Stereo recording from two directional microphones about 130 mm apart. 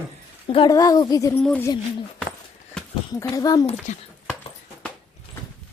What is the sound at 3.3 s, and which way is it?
Speech, 30° left (ahead or behind).